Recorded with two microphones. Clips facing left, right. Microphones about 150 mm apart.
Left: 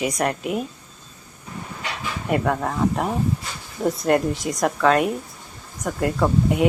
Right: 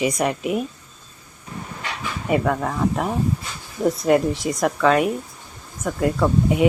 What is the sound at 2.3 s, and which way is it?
Speech, centre (ahead or behind).